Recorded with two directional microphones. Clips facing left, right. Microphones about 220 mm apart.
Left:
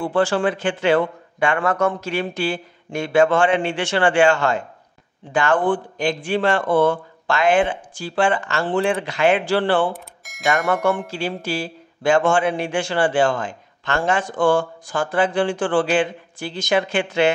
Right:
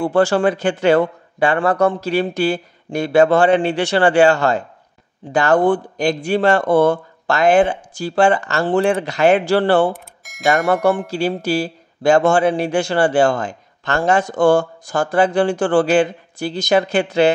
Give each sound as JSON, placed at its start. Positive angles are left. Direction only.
{"t": 0.0, "sound": "a man's voice", "side_deg": -40}
{"t": 9.9, "sound": "bell", "side_deg": 0}
{"t": 10.7, "sound": "a man's voice", "side_deg": -35}